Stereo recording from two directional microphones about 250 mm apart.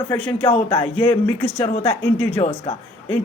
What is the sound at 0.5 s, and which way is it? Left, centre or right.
Speech, centre.